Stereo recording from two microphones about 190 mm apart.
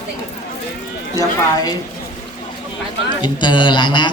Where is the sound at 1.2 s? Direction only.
20° left (ahead or behind).